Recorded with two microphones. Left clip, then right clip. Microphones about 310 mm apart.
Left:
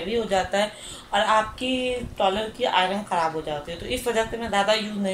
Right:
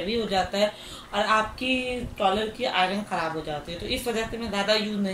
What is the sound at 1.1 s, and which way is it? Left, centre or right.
A woman's voice, left.